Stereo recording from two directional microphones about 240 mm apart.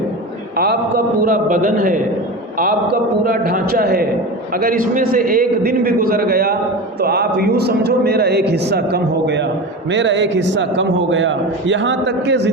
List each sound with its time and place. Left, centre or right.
0.5 s a man's voice: right
3.2 s a man's voice: right